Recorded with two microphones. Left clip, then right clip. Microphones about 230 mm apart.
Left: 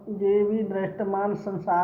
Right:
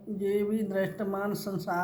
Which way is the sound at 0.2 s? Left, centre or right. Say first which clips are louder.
Left 7 dB; right.